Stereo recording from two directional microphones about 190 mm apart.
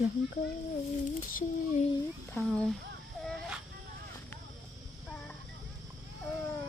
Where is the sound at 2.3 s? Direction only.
5° left (ahead or behind).